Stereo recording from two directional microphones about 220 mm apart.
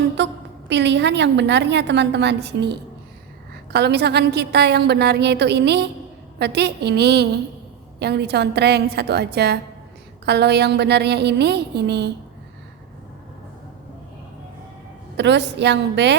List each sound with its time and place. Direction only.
0.2 s a sound: 55° right (ahead or behind)
0.7 s a woman's voice: 55° right (ahead or behind)
15.1 s a woman's voice: 50° right (ahead or behind)